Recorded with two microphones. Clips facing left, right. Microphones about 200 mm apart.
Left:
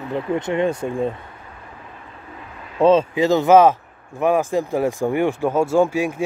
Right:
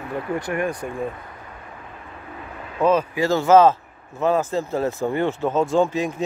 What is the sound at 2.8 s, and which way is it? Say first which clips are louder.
Speech: left 4 dB; 25° left (ahead or behind).